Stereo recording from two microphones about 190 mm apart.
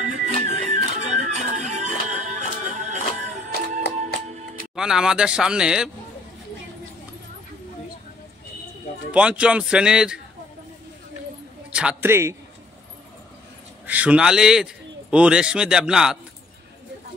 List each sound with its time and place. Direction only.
0.0 s music: 40° right (ahead or behind)
4.7 s a man's voice: 5° right (ahead or behind)
9.1 s a man's voice: 5° right (ahead or behind)
11.7 s a man's voice: 5° right (ahead or behind)
13.8 s a man's voice: 10° right (ahead or behind)